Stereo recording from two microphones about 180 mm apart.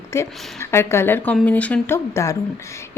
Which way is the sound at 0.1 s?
15° left (ahead or behind).